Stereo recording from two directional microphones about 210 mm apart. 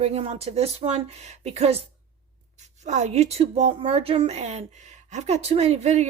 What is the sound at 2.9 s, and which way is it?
Speech, 35° right (ahead or behind).